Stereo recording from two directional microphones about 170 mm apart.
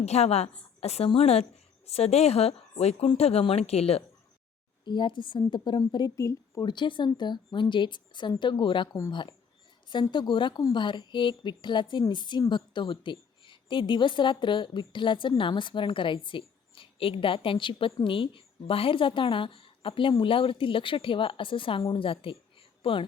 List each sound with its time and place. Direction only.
0.0 s a woman's voice: 40° left (ahead or behind)